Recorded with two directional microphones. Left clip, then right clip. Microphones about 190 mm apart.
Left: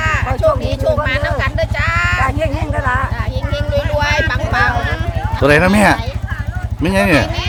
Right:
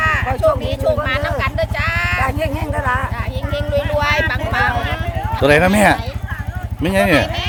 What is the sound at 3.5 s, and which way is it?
Vehicle, 25° left (ahead or behind).